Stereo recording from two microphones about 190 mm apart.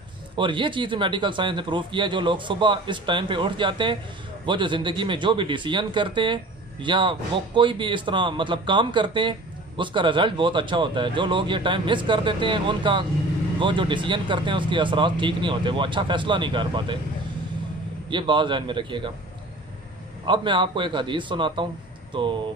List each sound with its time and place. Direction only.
0.4 s a man's voice: 25° right (ahead or behind)
18.1 s a man's voice: 25° right (ahead or behind)
20.2 s a man's voice: 25° right (ahead or behind)